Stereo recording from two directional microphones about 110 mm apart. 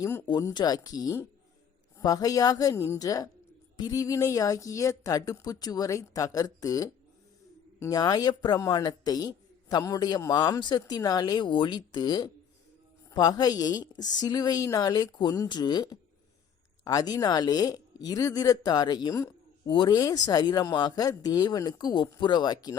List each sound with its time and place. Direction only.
0.0 s a woman's voice: 25° left (ahead or behind)
0.5 s a man's voice: 35° left (ahead or behind)
20.0 s a man's voice: 35° left (ahead or behind)